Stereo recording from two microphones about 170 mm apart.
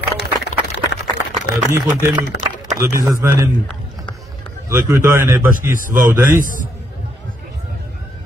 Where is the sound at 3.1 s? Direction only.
15° right (ahead or behind).